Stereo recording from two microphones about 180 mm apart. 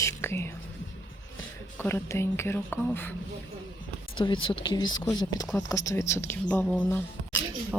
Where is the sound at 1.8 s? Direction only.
15° left (ahead or behind).